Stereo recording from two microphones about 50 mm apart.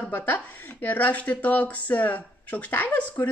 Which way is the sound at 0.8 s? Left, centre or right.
Left.